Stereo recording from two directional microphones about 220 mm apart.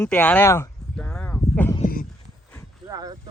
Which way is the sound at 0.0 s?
10° left (ahead or behind).